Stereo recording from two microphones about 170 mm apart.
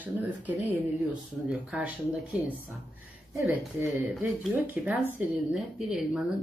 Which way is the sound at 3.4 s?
15° right (ahead or behind).